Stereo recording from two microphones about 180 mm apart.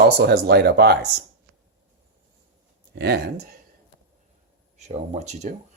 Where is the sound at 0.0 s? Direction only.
65° right (ahead or behind).